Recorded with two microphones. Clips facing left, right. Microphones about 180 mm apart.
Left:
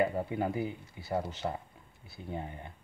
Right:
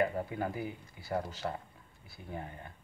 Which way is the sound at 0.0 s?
25° left (ahead or behind).